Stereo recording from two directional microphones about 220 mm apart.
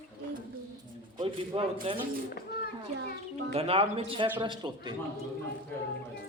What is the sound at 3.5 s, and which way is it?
A man's voice, 25° right (ahead or behind).